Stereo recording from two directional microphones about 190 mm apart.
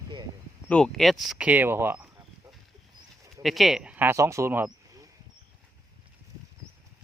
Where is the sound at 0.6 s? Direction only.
5° left (ahead or behind).